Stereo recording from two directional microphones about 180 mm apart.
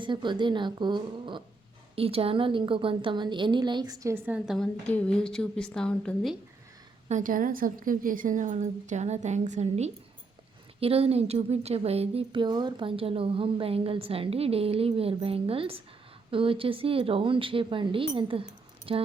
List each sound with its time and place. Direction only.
0.0 s a woman's voice: 25° right (ahead or behind); by 6.3 s 5° left (ahead or behind)
7.1 s a woman's voice: 50° right (ahead or behind); by 19.0 s 30° right (ahead or behind)